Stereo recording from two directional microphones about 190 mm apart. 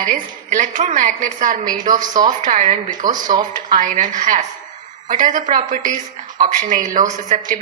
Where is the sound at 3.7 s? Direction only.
45° right (ahead or behind).